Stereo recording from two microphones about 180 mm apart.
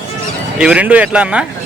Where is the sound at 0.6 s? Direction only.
5° right (ahead or behind).